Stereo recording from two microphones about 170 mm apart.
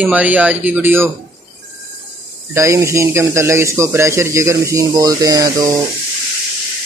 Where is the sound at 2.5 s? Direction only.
15° right (ahead or behind).